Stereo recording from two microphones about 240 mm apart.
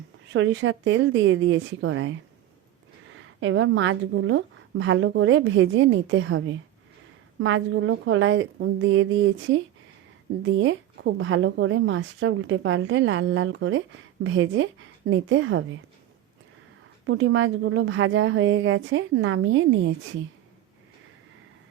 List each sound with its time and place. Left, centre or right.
0.3 s a woman's voice: right
17.1 s a woman's voice: right